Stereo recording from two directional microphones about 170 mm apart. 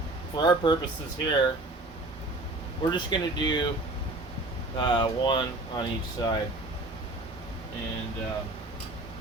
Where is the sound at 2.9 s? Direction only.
25° left (ahead or behind).